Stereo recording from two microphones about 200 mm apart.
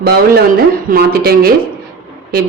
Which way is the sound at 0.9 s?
50° right (ahead or behind).